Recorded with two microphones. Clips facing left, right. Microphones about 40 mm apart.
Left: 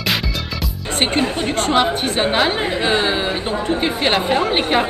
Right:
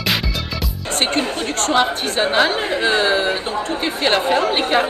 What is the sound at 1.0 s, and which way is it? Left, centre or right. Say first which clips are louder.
Chatter: left 2 dB; centre.